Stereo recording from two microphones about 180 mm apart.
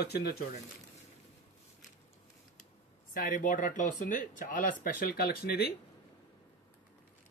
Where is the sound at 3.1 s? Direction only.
50° left (ahead or behind).